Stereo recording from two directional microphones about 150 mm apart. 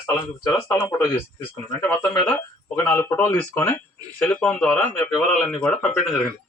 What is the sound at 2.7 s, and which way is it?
Speech, 10° left (ahead or behind).